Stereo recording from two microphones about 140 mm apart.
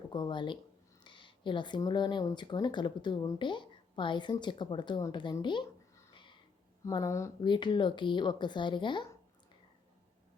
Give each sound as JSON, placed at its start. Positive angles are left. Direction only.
{"t": 0.1, "sound": "speech", "side_deg": 35}
{"t": 6.1, "sound": "a sound", "side_deg": 35}
{"t": 6.8, "sound": "speech", "side_deg": 25}
{"t": 7.4, "sound": "speech", "side_deg": 35}